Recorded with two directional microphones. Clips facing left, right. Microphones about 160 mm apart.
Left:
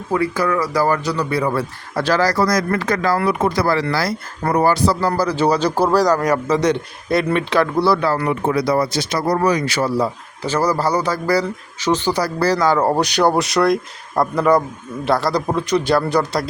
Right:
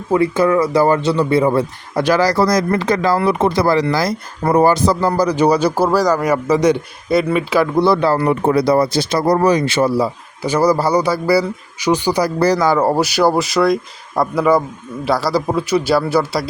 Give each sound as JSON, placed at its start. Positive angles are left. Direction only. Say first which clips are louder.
{"t": 0.1, "sound": "a man's voice", "louder": "right 5 dB", "side_deg": -25}
{"t": 2.3, "sound": "speech", "louder": "right 3 dB", "side_deg": -25}
{"t": 7.8, "sound": "a man's voice", "louder": "right 3 dB", "side_deg": -25}
{"t": 10.0, "sound": "a man's voice", "louder": "right 2 dB", "side_deg": -10}